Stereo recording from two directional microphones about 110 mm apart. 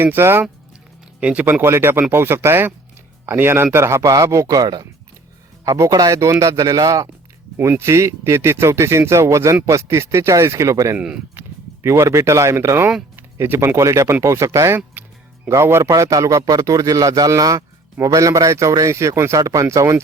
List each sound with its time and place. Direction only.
0.0 s a man's voice: 20° right (ahead or behind)
10.9 s speech: 10° right (ahead or behind)
11.8 s a man's voice: 25° right (ahead or behind)